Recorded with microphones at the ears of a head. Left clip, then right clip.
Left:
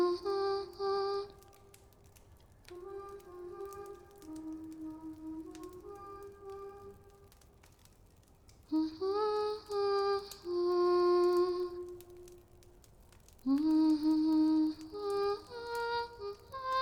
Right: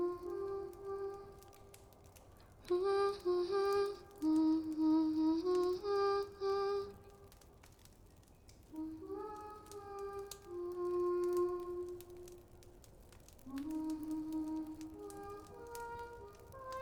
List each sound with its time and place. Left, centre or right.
0.0 s music: left
2.6 s music: right
8.7 s music: left
11.9 s a sound: centre
13.4 s music: left